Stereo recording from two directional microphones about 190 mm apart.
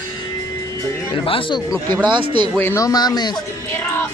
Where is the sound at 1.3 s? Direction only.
25° left (ahead or behind).